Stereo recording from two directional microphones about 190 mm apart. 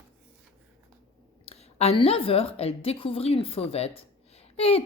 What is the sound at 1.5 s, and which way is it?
A woman's voice, 35° left (ahead or behind).